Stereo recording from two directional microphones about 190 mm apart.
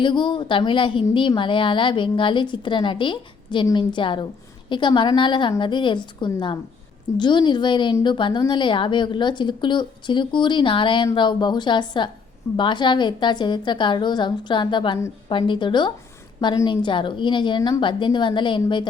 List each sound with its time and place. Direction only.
0.0 s a woman's voice: 25° left (ahead or behind)